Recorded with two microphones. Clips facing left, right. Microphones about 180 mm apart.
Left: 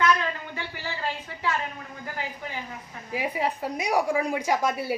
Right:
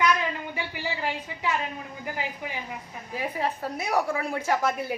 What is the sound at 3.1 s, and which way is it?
A woman's voice, 10° left (ahead or behind).